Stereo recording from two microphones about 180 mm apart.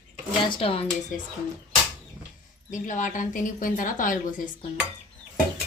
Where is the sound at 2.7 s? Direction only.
45° left (ahead or behind).